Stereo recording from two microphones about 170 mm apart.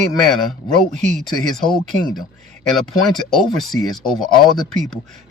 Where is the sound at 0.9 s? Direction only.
45° right (ahead or behind).